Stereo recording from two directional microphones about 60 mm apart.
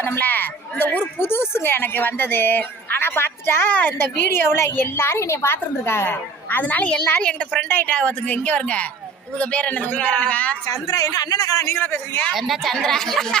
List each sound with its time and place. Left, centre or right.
0.0 s a woman's voice: left
7.6 s a man's voice: left
7.9 s a man's voice: left
10.7 s a man's voice: left
11.8 s a man's voice: left
12.3 s speech: centre
12.7 s speech: centre